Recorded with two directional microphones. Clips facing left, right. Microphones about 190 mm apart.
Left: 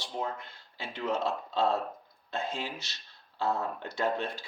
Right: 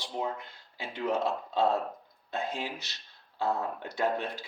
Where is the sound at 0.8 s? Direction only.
15° right (ahead or behind).